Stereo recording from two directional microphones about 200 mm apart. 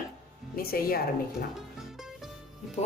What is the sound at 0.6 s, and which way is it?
Speech, 50° left (ahead or behind).